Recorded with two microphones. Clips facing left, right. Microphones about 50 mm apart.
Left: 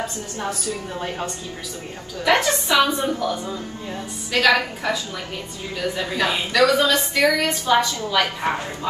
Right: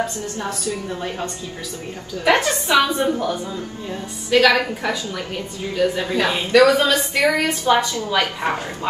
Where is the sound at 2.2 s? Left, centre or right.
Right.